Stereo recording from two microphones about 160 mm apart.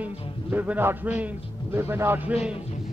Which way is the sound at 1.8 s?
15° right (ahead or behind).